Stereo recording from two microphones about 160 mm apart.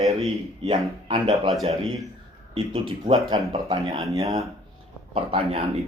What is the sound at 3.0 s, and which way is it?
Speech, 25° right (ahead or behind).